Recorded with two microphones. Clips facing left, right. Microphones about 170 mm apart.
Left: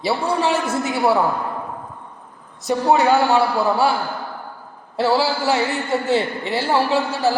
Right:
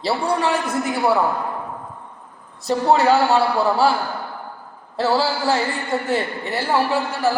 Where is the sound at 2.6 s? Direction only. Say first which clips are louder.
Even; 15° left (ahead or behind).